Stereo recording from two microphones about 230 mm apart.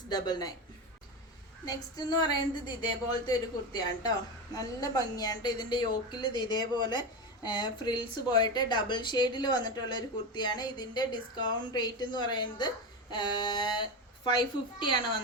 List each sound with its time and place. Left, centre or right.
0.1 s a woman's voice: centre
1.6 s a woman's voice: centre
3.2 s a woman's voice: centre